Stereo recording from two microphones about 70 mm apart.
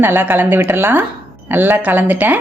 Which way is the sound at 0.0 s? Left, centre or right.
Right.